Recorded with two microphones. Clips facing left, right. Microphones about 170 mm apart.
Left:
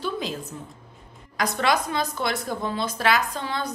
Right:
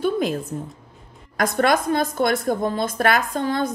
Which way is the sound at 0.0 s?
55° right (ahead or behind).